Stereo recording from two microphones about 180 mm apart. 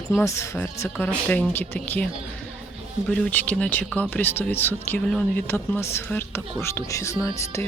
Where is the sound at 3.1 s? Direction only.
10° left (ahead or behind).